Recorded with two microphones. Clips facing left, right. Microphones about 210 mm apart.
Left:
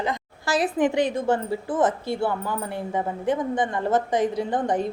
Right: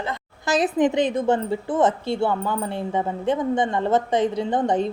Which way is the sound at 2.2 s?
65° right (ahead or behind).